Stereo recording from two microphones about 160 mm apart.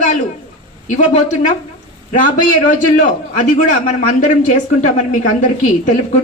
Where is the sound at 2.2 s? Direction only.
55° left (ahead or behind).